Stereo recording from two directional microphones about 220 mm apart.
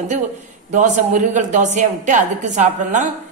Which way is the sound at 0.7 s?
35° right (ahead or behind).